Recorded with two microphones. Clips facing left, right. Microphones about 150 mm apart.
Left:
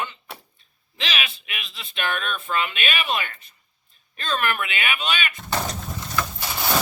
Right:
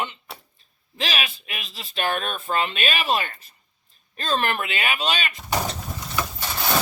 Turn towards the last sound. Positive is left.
turn(degrees=5)  # may be behind; listen again after turning